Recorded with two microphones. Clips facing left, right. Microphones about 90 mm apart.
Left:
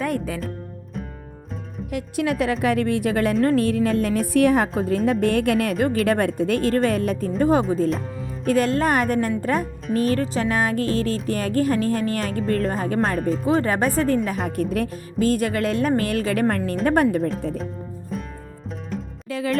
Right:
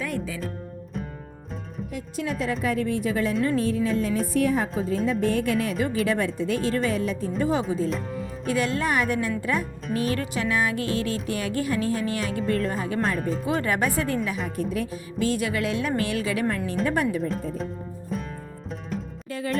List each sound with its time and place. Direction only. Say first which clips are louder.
0.0 s speech: left 5 dB; 50° left (ahead or behind)
1.9 s speech: left 7 dB; 70° left (ahead or behind)
4.4 s a woman's voice: left 7 dB; 70° left (ahead or behind); by 9.6 s 40° left (ahead or behind)
9.9 s music: left 5 dB; 40° left (ahead or behind)
13.1 s speech: left 4 dB; centre (ahead or behind)
13.4 s music: left 5 dB; 35° left (ahead or behind)
14.3 s a woman's voice: left 4 dB; 50° left (ahead or behind)
18.1 s music: even; centre (ahead or behind)